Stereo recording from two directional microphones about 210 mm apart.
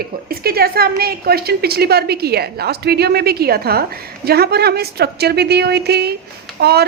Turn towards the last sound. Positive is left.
turn(degrees=-50)  # may be behind; listen again after turning